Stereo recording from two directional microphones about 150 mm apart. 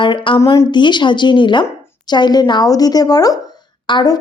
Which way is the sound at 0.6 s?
30° left (ahead or behind).